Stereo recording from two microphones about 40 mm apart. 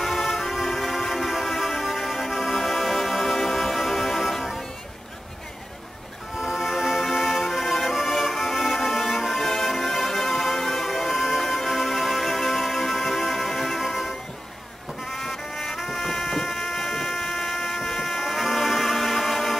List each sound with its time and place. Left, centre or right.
0.0 s music: centre
6.3 s music: centre
15.1 s music: centre